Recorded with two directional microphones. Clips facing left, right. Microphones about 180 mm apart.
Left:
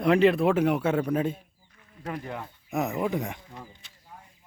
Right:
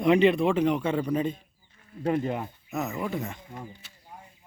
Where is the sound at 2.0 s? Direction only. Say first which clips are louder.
Right 8 dB; 25° right (ahead or behind).